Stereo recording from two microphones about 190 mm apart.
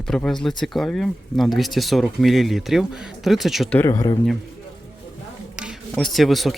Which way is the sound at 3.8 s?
15° left (ahead or behind).